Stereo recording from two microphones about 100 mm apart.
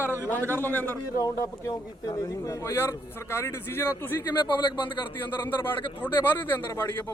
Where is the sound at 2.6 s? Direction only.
25° left (ahead or behind).